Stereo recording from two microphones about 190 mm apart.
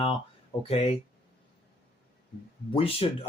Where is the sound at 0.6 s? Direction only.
30° left (ahead or behind).